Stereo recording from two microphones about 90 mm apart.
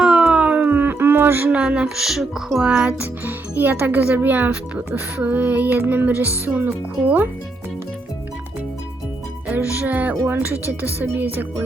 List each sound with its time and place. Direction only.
0.0 s speech: 10° right (ahead or behind)
9.5 s speech: 15° right (ahead or behind)